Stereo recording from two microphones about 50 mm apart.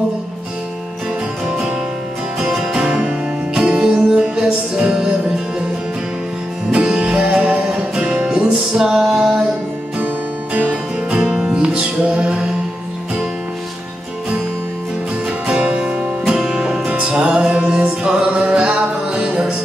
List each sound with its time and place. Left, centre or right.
2.3 s music: centre
6.7 s music: centre
9.9 s music: right
11.1 s music: centre
15.2 s music: centre
16.8 s music: centre